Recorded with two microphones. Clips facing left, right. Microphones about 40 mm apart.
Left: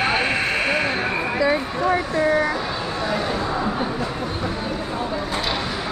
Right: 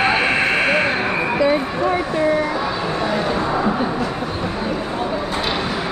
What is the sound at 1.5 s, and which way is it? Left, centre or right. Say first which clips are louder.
Speech: right 2 dB; centre.